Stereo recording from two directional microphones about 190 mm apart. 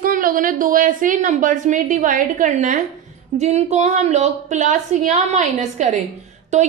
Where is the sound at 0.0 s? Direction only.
45° right (ahead or behind).